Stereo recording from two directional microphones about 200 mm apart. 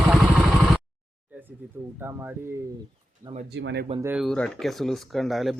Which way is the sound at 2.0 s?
10° right (ahead or behind).